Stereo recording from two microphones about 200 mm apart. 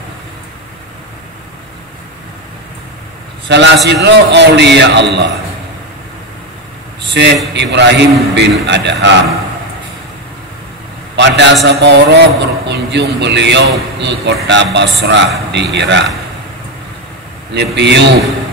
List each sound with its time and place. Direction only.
3.4 s a man's voice: 60° right (ahead or behind)
7.2 s a man's voice: 55° right (ahead or behind)
11.1 s a man's voice: 60° right (ahead or behind)
17.7 s a man's voice: 60° right (ahead or behind)